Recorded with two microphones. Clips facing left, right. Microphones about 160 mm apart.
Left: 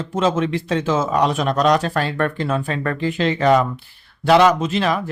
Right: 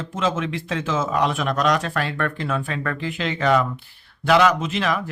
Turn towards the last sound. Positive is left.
turn(degrees=30)  # may be behind; listen again after turning